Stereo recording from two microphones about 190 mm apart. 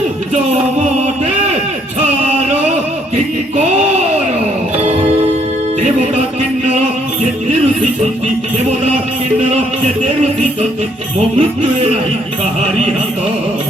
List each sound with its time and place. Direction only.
9.5 s music: 35° right (ahead or behind)
11.3 s music: 30° right (ahead or behind)